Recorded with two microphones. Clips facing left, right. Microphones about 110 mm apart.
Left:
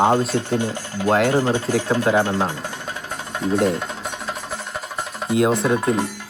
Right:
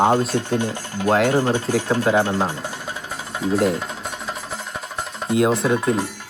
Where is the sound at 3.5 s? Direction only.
Centre (ahead or behind).